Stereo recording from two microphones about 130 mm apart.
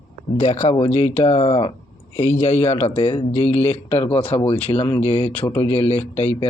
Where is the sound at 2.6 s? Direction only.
50° left (ahead or behind).